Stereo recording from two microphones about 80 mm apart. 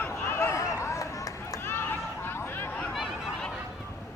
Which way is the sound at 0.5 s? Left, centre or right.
Left.